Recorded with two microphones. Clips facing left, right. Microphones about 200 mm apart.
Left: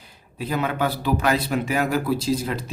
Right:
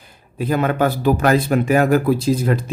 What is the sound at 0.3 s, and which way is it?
Speech, 50° right (ahead or behind).